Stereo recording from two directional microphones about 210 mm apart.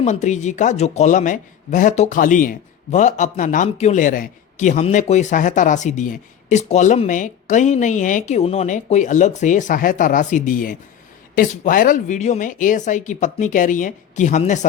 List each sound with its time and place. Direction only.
0.0 s a man's voice: 35° left (ahead or behind)